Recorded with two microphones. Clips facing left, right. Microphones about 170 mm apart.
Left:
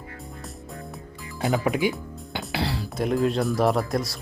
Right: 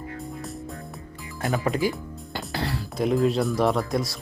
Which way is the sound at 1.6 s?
Centre (ahead or behind).